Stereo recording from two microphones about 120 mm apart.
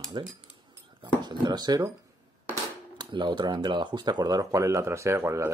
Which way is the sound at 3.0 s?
40° right (ahead or behind).